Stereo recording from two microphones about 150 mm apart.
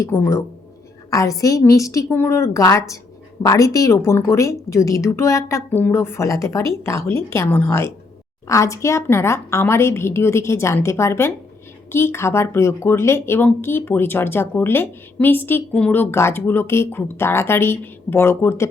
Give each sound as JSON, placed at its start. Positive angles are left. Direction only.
{"t": 0.0, "sound": "speech", "side_deg": 15}